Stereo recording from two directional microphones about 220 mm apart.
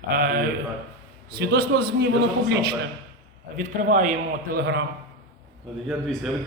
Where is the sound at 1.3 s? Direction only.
45° right (ahead or behind).